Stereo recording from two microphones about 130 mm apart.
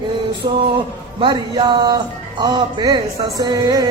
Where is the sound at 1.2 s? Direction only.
35° right (ahead or behind).